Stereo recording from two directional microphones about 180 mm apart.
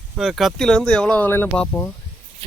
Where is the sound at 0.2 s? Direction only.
Centre (ahead or behind).